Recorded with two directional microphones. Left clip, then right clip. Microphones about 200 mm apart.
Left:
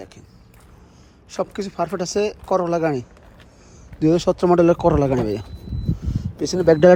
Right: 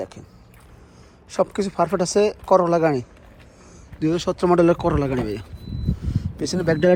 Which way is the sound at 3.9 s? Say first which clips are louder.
Left 5 dB; 25° left (ahead or behind).